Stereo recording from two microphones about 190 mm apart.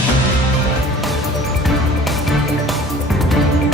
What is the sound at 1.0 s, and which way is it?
Music, centre (ahead or behind).